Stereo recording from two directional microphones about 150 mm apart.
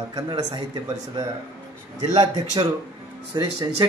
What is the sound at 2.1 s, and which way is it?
Speech, 25° right (ahead or behind).